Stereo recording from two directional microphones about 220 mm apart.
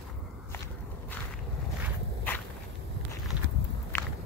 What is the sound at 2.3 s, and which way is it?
Walk, 10° left (ahead or behind).